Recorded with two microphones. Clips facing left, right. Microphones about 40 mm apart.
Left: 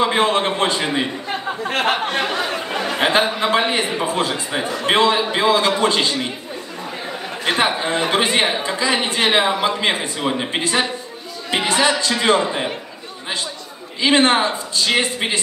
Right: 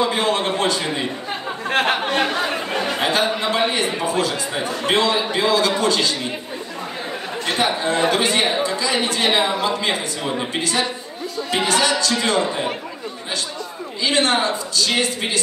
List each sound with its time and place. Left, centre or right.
0.0 s a man's voice: left
3.0 s a man's voice: left
7.4 s a man's voice: left
11.5 s music: left
14.0 s a man's voice: left